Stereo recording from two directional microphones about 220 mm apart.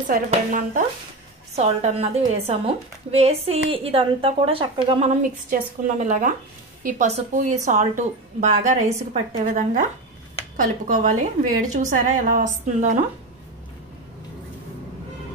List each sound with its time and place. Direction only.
0.3 s a woman's voice: 35° right (ahead or behind)